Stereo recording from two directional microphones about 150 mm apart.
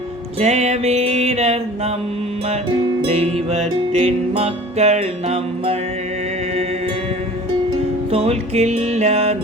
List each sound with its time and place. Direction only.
0.3 s music: 45° right (ahead or behind)
3.1 s music: 45° right (ahead or behind)
8.1 s music: 45° right (ahead or behind)